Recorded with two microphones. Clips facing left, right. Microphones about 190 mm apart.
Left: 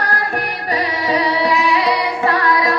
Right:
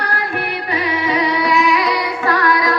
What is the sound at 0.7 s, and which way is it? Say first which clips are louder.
Music: left 1 dB; 35° left (ahead or behind).